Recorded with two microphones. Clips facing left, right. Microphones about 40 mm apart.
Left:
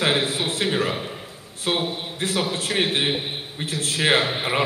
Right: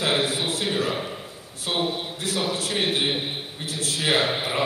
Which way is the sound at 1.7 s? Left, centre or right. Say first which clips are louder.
Left 1 dB; left.